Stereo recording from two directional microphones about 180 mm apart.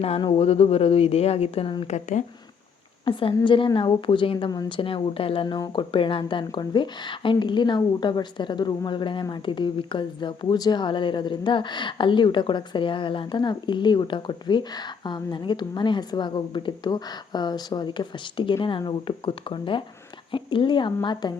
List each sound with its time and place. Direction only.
0.0 s a woman's voice: 35° left (ahead or behind)
1.9 s a woman's voice: 40° left (ahead or behind)
3.0 s speech: 30° left (ahead or behind)